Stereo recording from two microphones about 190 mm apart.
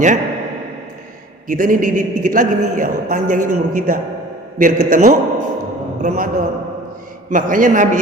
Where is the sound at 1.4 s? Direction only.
45° right (ahead or behind).